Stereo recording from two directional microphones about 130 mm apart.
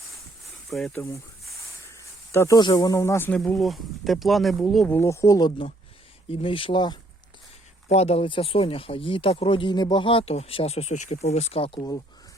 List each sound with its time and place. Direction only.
0.7 s speech: 5° left (ahead or behind)
2.3 s speech: 20° left (ahead or behind)
2.6 s speech: 35° left (ahead or behind)
2.9 s speech: 25° left (ahead or behind); by 4.9 s centre (ahead or behind)
4.9 s speech: 20° left (ahead or behind)
5.5 s speech: 45° left (ahead or behind)
7.9 s speech: 55° left (ahead or behind)